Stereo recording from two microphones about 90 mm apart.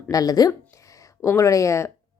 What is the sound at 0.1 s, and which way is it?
Speech, 45° left (ahead or behind).